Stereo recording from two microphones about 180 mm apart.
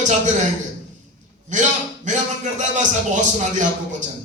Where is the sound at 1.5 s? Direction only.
40° right (ahead or behind).